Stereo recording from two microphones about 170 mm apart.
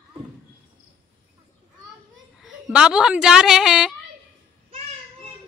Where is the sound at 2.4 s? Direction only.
Centre (ahead or behind).